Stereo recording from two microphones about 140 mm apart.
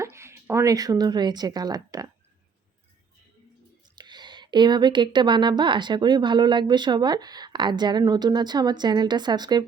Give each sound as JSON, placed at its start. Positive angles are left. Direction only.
{"t": 0.0, "sound": "a woman's voice", "side_deg": -20}
{"t": 3.9, "sound": "speech", "side_deg": -30}